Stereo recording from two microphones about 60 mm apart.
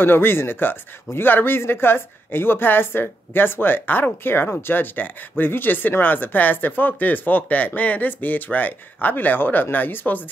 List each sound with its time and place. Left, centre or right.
0.0 s speech: left